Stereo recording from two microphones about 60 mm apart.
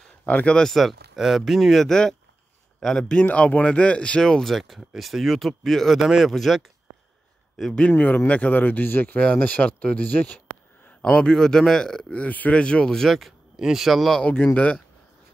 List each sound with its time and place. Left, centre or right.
0.2 s speech: left
0.6 s speech: centre
4.2 s speech: centre
7.9 s speech: left
9.2 s speech: centre
10.9 s a sound: left
11.2 s speech: centre
12.1 s speech: left
13.1 s speech: centre
14.3 s speech: left